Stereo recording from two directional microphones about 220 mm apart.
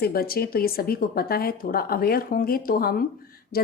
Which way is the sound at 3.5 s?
45° left (ahead or behind).